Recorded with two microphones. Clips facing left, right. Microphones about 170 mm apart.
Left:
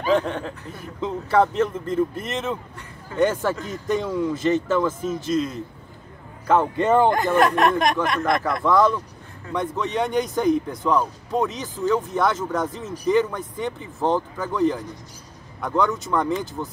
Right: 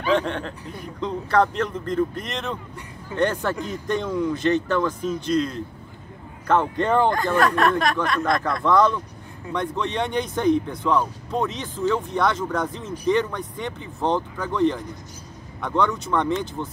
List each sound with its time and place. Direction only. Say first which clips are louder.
0.1 s a man's voice: left 1 dB; 5° left (ahead or behind)
7.1 s speech: left 2 dB; 20° left (ahead or behind)
8.6 s speech: even; 5° left (ahead or behind)